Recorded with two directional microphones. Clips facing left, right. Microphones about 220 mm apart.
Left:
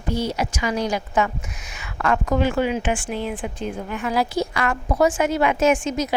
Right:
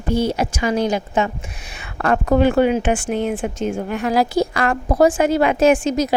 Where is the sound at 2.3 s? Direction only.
60° right (ahead or behind).